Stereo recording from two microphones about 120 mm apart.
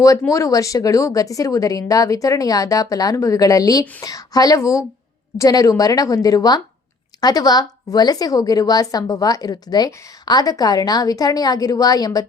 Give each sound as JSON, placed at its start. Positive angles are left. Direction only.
{"t": 0.0, "sound": "a woman's voice", "side_deg": 25}